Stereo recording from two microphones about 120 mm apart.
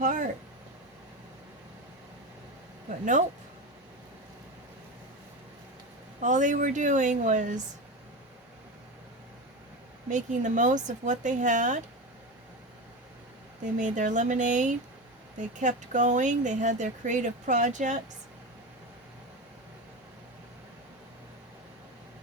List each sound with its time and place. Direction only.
0.0 s a sound: 90° right
6.2 s speech: 90° right
10.1 s speech: 90° right
13.7 s speech: 90° right